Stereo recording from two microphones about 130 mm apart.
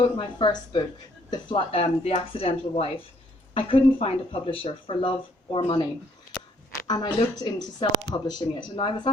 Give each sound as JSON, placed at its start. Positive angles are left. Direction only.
{"t": 0.0, "sound": "a woman's voice", "side_deg": 40}
{"t": 8.7, "sound": "speech", "side_deg": 45}